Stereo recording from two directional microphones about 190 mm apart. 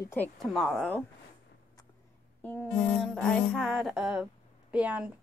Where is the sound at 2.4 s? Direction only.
10° left (ahead or behind).